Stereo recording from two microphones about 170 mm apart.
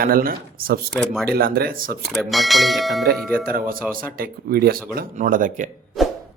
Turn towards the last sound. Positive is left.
turn(degrees=0)  # may be behind; listen again after turning